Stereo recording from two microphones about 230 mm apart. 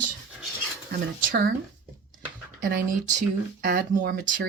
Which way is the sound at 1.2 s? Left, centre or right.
Right.